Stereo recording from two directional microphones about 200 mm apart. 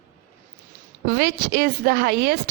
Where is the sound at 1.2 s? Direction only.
50° right (ahead or behind).